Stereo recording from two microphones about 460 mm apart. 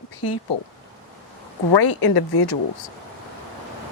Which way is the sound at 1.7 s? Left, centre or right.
Left.